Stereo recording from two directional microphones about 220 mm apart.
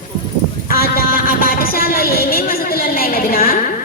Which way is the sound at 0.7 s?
45° left (ahead or behind).